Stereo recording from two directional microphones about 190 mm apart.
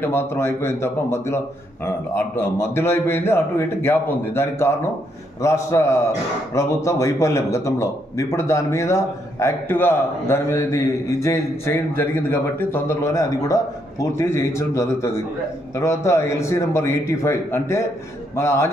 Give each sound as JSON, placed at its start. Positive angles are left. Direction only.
{"t": 0.0, "sound": "a man's voice", "side_deg": 10}